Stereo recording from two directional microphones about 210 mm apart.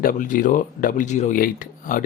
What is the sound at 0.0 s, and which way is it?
Speech, 40° left (ahead or behind).